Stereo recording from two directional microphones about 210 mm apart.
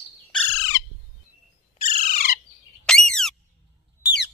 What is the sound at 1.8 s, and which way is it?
Bird, 40° left (ahead or behind).